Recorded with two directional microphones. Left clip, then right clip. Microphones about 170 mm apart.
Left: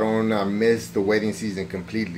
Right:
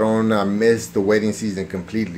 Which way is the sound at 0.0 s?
25° right (ahead or behind).